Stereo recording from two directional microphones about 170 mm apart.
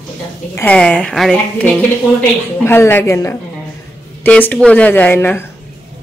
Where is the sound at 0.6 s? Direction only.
10° left (ahead or behind).